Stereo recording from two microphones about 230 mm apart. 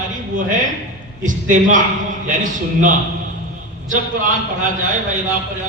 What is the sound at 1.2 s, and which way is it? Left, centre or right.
A man's voice, right.